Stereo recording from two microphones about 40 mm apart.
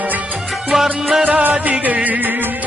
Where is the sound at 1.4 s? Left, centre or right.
Right.